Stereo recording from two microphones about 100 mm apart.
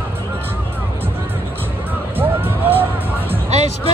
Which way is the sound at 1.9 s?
20° right (ahead or behind).